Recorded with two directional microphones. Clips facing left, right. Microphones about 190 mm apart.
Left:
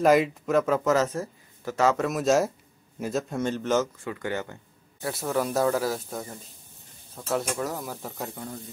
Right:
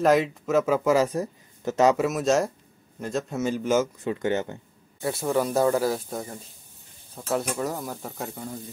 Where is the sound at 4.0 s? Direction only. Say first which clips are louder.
Right 5 dB; 25° right (ahead or behind).